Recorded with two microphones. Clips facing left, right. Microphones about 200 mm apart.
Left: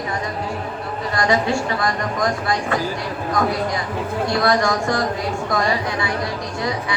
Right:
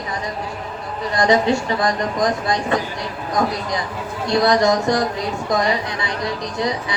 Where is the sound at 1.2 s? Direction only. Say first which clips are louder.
Right 3 dB; 20° right (ahead or behind).